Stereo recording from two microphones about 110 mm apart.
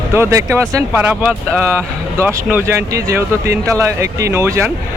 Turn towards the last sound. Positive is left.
turn(degrees=-25)  # may be behind; listen again after turning